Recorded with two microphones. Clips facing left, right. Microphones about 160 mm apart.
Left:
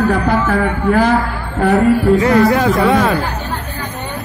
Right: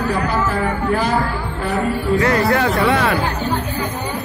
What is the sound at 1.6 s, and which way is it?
Music, 60° left (ahead or behind).